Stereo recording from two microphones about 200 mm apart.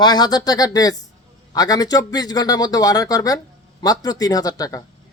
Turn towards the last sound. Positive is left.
turn(degrees=20)  # may be behind; listen again after turning